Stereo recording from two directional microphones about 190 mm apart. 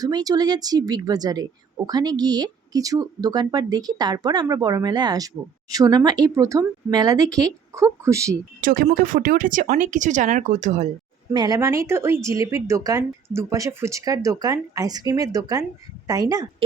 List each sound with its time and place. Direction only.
0.0 s speech: 20° right (ahead or behind)
8.6 s speech: 45° right (ahead or behind)
11.3 s speech: 20° right (ahead or behind)